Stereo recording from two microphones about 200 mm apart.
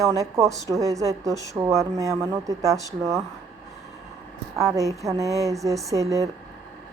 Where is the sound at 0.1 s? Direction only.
15° right (ahead or behind).